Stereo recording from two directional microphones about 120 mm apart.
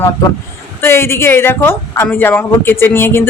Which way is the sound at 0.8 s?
20° left (ahead or behind).